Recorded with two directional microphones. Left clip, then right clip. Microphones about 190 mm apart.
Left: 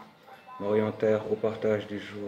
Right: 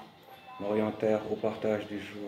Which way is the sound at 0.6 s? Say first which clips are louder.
Left 3 dB; 15° left (ahead or behind).